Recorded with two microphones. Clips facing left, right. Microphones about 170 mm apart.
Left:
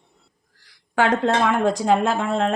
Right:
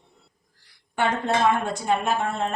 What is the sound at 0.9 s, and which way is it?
A woman's voice, 90° left.